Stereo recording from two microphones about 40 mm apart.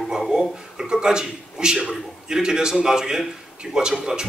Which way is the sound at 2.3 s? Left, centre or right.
Centre.